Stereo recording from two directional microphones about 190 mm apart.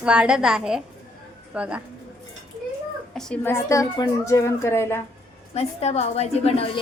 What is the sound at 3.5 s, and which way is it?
A woman's voice, 15° left (ahead or behind).